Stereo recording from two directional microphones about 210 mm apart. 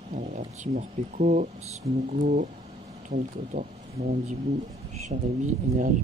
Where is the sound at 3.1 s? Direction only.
40° right (ahead or behind).